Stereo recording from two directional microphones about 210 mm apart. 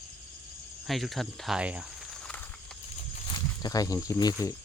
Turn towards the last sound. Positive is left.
turn(degrees=15)  # may be behind; listen again after turning